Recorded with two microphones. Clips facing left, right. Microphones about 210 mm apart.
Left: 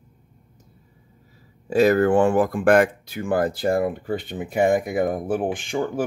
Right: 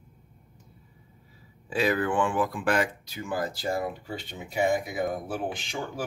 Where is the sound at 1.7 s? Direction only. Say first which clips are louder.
Left 9 dB; 45° left (ahead or behind).